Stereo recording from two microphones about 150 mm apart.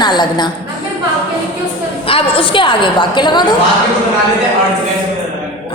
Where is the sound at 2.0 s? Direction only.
35° left (ahead or behind).